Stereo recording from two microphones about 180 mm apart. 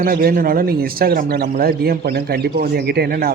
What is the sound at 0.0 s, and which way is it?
A man's voice, 55° right (ahead or behind).